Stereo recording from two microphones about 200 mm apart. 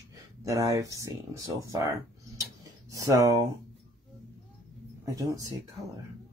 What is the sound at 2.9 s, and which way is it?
Speech, 15° right (ahead or behind).